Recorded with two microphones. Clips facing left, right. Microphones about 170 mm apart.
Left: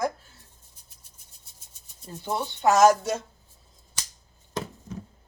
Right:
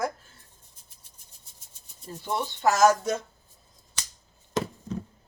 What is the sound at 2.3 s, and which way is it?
Speech, 25° left (ahead or behind).